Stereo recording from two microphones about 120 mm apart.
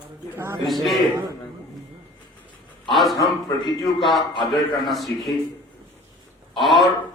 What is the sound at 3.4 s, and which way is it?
Speech, 35° left (ahead or behind).